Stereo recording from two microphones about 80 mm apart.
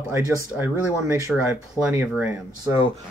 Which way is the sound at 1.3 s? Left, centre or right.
Centre.